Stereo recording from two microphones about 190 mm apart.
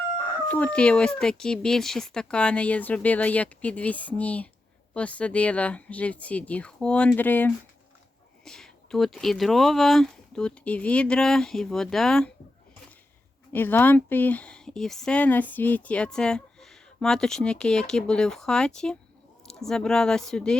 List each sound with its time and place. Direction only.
0.4 s speech: 5° left (ahead or behind)
13.5 s speech: 10° left (ahead or behind)